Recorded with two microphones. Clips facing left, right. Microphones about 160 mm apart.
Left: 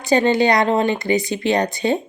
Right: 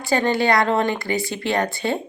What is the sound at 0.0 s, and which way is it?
Speech, 20° left (ahead or behind).